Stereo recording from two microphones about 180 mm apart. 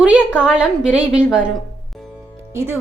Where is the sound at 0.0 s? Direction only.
5° right (ahead or behind).